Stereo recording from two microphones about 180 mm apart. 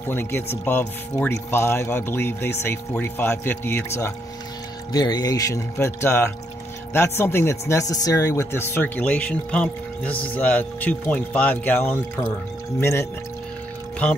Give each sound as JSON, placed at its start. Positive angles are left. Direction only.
{"t": 0.1, "sound": "speech", "side_deg": 10}